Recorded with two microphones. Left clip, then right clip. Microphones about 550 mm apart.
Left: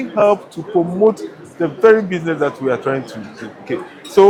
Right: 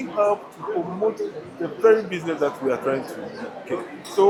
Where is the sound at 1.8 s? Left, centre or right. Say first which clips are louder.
Left 6 dB; left.